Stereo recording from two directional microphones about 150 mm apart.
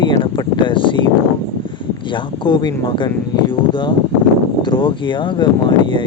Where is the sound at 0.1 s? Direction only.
30° left (ahead or behind).